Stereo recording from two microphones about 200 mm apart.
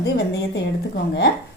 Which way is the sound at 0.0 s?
55° left (ahead or behind).